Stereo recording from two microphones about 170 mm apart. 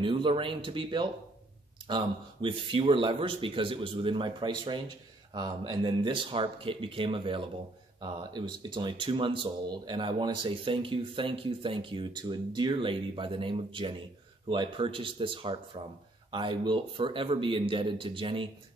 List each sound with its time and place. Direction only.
0.0 s speech: 30° right (ahead or behind)